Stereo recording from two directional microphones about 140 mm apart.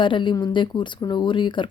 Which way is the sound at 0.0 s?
35° left (ahead or behind).